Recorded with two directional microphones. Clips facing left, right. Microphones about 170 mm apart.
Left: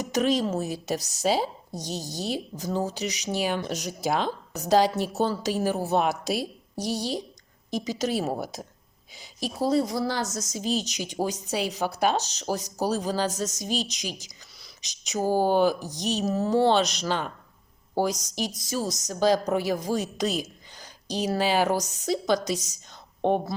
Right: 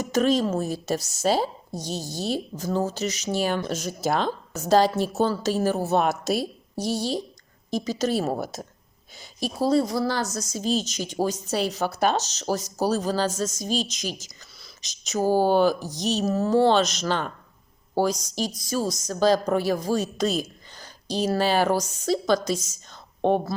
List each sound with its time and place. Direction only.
0.0 s a woman's voice: 15° left (ahead or behind)
6.0 s a woman's voice: 45° right (ahead or behind)
6.4 s a woman's voice: 15° left (ahead or behind)
8.2 s a woman's voice: 40° right (ahead or behind)
9.6 s a woman's voice: 20° left (ahead or behind)
17.9 s a woman's voice: 15° left (ahead or behind)